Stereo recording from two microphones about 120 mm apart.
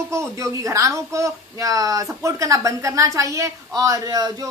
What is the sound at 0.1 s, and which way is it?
A woman's voice, 25° right (ahead or behind).